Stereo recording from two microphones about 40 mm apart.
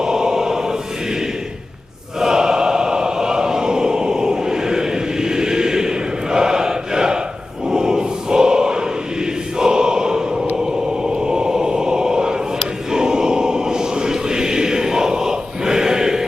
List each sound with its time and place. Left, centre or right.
0.0 s choir: centre
2.1 s choir: centre
9.6 s a sound: centre
12.9 s choir: centre